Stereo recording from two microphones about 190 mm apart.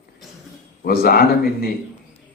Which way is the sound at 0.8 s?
50° left (ahead or behind).